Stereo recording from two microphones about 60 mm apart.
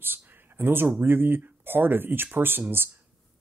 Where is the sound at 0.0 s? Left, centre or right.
Right.